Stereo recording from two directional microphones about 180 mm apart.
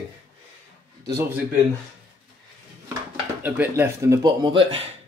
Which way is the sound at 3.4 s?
10° right (ahead or behind).